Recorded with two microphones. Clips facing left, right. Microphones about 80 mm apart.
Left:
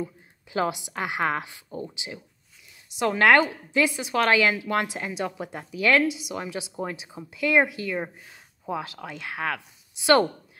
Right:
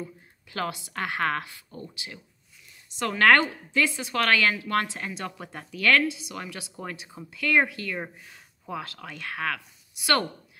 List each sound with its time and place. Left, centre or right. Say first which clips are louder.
0.0 s a woman's voice: left 5 dB; centre